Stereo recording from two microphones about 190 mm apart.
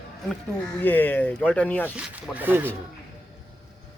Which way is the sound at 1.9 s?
5° right (ahead or behind).